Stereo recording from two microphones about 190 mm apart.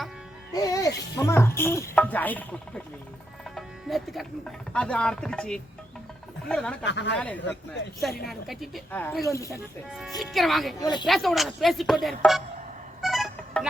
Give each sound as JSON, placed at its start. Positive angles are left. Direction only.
{"t": 0.5, "sound": "music", "side_deg": 20}
{"t": 1.1, "sound": "speech", "side_deg": 15}
{"t": 6.8, "sound": "speech", "side_deg": 70}
{"t": 7.2, "sound": "speech", "side_deg": 10}
{"t": 10.2, "sound": "speech", "side_deg": 0}
{"t": 10.8, "sound": "speech", "side_deg": 20}
{"t": 11.0, "sound": "speech", "side_deg": 0}
{"t": 13.0, "sound": "music", "side_deg": 0}